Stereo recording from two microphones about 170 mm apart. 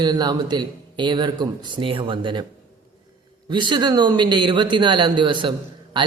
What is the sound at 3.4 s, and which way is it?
A man's voice, 25° right (ahead or behind).